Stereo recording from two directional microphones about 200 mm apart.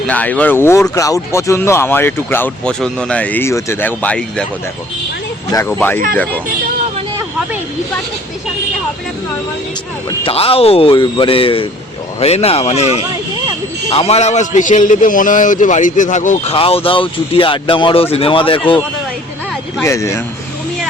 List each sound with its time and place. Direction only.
0.1 s speech: 5° left (ahead or behind)
5.5 s speech: 15° left (ahead or behind)
10.1 s a man's voice: 30° left (ahead or behind)
19.8 s speech: 15° left (ahead or behind)